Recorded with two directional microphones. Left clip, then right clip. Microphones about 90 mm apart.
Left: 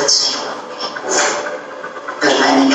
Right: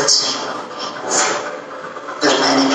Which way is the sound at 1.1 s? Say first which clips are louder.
Left 2 dB; 30° left (ahead or behind).